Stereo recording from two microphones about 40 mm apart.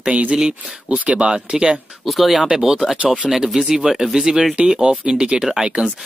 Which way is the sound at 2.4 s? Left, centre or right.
Centre.